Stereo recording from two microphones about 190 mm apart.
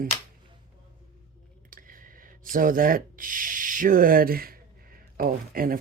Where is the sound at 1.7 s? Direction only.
45° right (ahead or behind).